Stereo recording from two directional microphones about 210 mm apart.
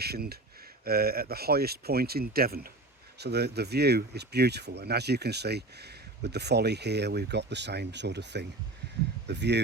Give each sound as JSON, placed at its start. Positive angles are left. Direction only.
{"t": 0.0, "sound": "speech", "side_deg": -50}